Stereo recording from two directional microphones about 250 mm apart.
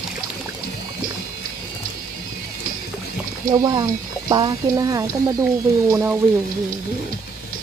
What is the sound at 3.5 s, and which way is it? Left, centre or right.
Speech, centre.